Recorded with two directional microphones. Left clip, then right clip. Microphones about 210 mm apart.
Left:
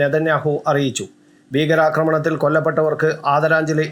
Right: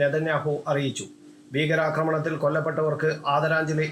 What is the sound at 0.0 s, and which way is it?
Speech, 25° left (ahead or behind).